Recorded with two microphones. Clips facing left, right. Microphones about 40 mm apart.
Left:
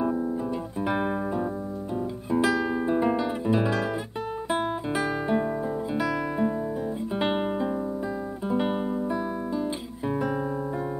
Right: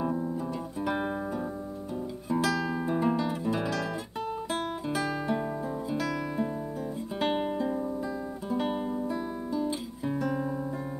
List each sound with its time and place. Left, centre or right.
0.0 s music: centre
2.2 s guitar: left
5.9 s music: left